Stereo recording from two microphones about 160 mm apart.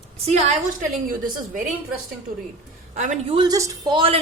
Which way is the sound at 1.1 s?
55° right (ahead or behind).